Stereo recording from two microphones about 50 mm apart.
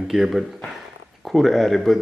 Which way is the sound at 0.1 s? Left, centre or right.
Centre.